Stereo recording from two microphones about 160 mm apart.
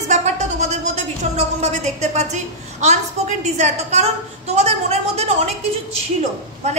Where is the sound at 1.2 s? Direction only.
45° right (ahead or behind).